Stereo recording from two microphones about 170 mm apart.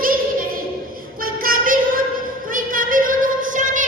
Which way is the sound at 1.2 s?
55° right (ahead or behind).